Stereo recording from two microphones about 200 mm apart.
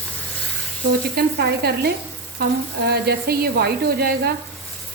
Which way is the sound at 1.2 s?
55° right (ahead or behind).